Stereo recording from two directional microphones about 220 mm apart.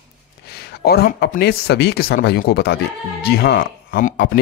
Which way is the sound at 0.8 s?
45° left (ahead or behind).